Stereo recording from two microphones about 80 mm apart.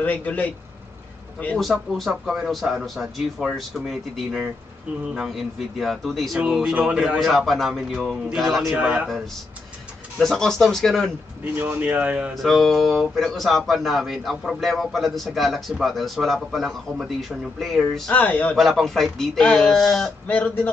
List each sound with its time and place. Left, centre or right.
0.0 s speech: centre
1.6 s a man's voice: centre
6.4 s a man's voice: centre
8.7 s speech: centre
9.0 s a man's voice: centre
11.5 s speech: right
12.4 s a man's voice: centre
18.1 s speech: centre
18.6 s a man's voice: centre
20.2 s speech: centre